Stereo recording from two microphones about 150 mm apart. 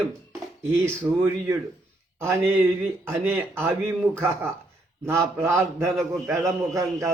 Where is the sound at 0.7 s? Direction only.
15° right (ahead or behind).